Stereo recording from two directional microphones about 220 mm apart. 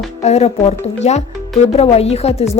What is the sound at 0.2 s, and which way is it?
Speech, 30° left (ahead or behind).